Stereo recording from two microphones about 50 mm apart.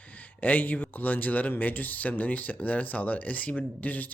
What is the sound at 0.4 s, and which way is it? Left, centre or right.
Speech, left.